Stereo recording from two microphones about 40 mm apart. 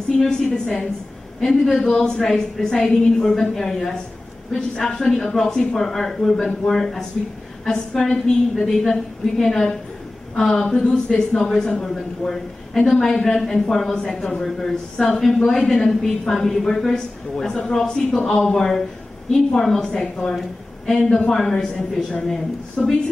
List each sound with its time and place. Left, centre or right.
0.3 s a woman's voice: centre
21.0 s a woman's voice: left
21.3 s speech: centre